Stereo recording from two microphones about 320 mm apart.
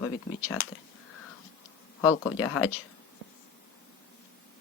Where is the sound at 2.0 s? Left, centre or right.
Left.